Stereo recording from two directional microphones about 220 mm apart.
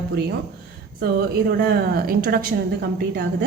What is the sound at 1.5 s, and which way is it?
A woman's voice, 45° right (ahead or behind).